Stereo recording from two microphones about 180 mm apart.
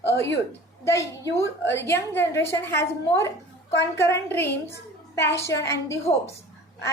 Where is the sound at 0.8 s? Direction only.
15° left (ahead or behind).